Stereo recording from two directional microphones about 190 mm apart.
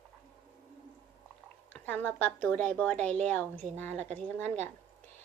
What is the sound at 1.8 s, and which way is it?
Speech, 10° left (ahead or behind).